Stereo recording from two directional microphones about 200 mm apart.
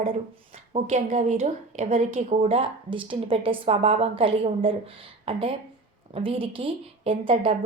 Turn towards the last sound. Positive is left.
turn(degrees=-25)  # may be behind; listen again after turning